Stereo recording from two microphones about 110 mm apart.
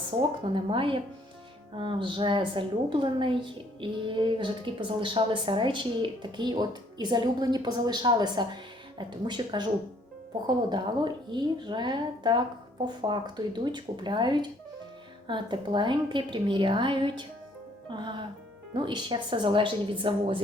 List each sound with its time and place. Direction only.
0.5 s a woman's voice: 50° right (ahead or behind)